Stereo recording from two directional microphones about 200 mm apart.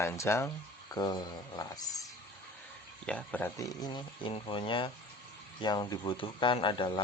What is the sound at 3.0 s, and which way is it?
Speech, 5° left (ahead or behind).